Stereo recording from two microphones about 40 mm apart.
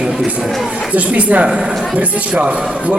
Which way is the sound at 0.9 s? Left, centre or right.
Right.